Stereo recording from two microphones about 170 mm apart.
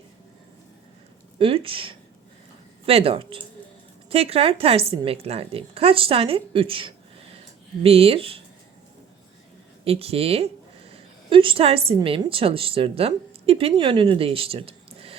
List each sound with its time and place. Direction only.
1.4 s a woman's voice: 35° right (ahead or behind)
9.8 s a woman's voice: 35° right (ahead or behind)